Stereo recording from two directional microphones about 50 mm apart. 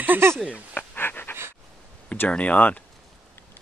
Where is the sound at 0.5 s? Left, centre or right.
Left.